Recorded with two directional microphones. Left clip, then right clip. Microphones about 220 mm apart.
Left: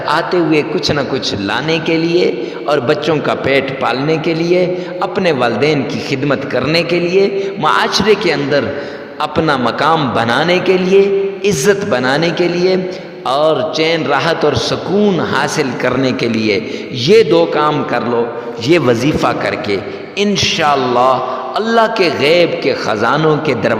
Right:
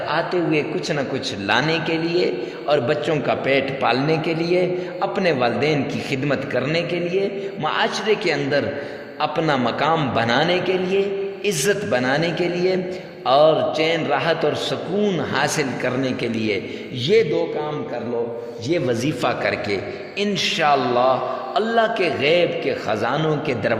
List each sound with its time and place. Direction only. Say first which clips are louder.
0.1 s a man's voice: left 8 dB; 25° left (ahead or behind)
17.1 s speech: left 9 dB; 35° left (ahead or behind)
18.7 s a man's voice: left 10 dB; 30° left (ahead or behind)